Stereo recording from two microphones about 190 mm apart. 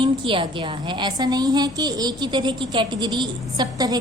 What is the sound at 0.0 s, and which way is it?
A woman's voice, 25° right (ahead or behind).